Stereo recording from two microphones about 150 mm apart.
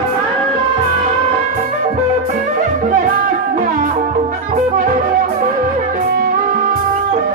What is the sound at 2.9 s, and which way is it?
Music, 65° right (ahead or behind).